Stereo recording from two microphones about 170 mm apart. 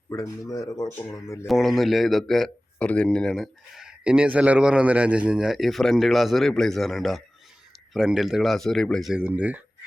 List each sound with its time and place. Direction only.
0.1 s speech: 20° left (ahead or behind)
1.5 s speech: centre (ahead or behind)